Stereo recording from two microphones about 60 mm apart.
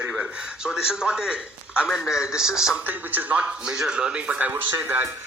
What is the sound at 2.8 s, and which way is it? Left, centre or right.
Speech, right.